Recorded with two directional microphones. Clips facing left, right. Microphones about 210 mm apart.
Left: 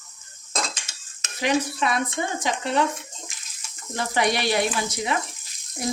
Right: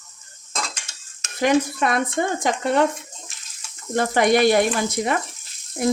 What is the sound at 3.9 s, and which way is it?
Speech, 50° right (ahead or behind).